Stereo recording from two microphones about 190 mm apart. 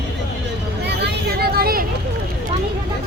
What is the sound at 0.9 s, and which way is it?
Vehicle, 60° right (ahead or behind).